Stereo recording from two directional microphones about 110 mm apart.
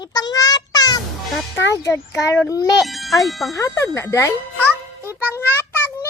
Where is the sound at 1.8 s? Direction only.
30° left (ahead or behind).